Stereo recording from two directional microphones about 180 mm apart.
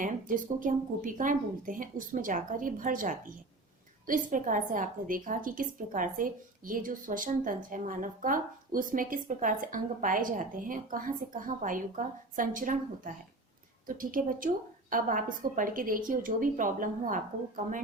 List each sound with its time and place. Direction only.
0.0 s a woman's voice: 45° right (ahead or behind)